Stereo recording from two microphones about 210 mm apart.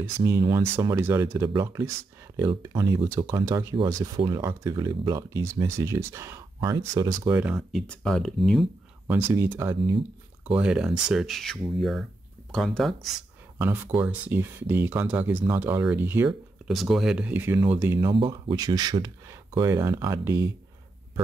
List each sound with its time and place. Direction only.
0.0 s speech: 15° right (ahead or behind)
9.0 s speech: 15° right (ahead or behind)
16.6 s speech: centre (ahead or behind); by 20.4 s 15° right (ahead or behind)